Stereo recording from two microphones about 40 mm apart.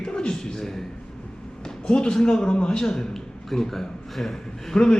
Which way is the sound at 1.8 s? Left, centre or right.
Left.